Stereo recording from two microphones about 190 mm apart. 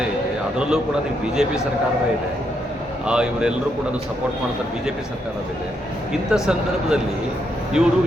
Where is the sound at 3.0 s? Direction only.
5° right (ahead or behind).